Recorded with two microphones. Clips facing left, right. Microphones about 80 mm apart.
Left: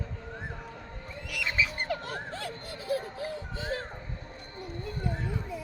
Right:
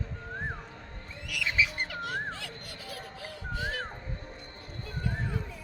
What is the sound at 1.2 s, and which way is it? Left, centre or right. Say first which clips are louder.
Bird: right 1 dB; left.